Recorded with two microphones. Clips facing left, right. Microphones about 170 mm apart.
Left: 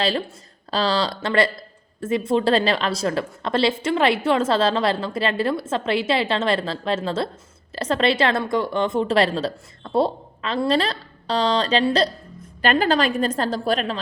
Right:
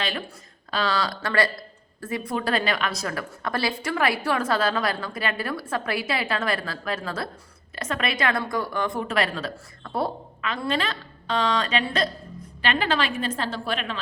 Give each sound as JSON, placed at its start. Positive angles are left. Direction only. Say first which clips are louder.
{"t": 0.7, "sound": "a woman's voice", "louder": "left 4 dB", "side_deg": 30}